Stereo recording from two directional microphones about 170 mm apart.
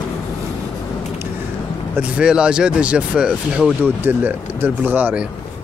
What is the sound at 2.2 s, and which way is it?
Speech, 5° right (ahead or behind).